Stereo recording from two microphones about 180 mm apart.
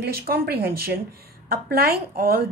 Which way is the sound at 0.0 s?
60° right (ahead or behind).